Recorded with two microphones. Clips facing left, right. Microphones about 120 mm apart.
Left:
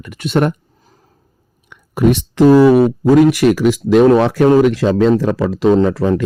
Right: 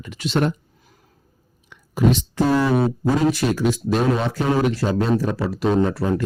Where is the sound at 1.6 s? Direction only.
60° left (ahead or behind).